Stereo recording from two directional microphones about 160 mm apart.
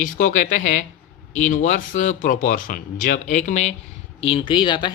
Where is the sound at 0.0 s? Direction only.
55° left (ahead or behind).